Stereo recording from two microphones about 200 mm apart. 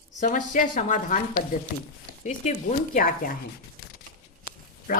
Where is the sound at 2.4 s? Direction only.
35° left (ahead or behind).